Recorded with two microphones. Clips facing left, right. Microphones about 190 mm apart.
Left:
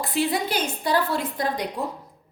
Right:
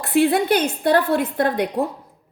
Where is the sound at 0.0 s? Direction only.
60° right (ahead or behind).